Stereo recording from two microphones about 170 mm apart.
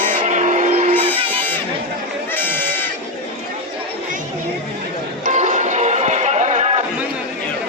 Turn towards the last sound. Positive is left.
turn(degrees=-40)  # may be behind; listen again after turning